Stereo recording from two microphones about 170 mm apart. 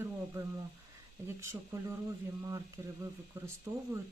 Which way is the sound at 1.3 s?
15° right (ahead or behind).